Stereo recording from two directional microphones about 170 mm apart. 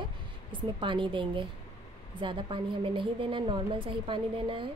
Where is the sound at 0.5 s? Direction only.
30° right (ahead or behind).